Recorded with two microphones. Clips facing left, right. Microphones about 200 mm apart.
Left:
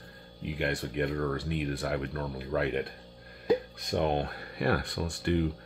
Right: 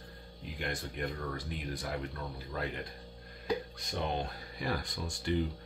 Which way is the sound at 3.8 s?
60° left (ahead or behind).